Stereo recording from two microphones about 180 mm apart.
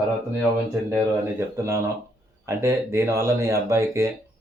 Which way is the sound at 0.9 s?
15° right (ahead or behind).